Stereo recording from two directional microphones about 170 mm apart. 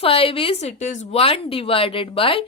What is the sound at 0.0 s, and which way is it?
Speech, 35° left (ahead or behind).